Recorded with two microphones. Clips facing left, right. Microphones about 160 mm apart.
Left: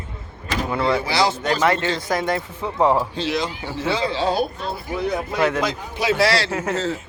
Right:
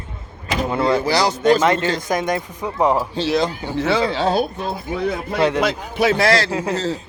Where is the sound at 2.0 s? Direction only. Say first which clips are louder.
Right 1 dB; 20° right (ahead or behind).